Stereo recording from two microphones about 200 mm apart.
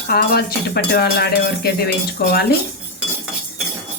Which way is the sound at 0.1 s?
50° left (ahead or behind).